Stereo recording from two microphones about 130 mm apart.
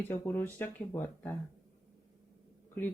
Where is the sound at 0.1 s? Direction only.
15° left (ahead or behind).